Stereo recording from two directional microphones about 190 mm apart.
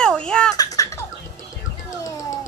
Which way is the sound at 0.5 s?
20° left (ahead or behind).